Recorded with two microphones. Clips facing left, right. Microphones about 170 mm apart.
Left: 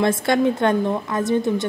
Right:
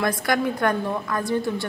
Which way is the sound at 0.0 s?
25° left (ahead or behind).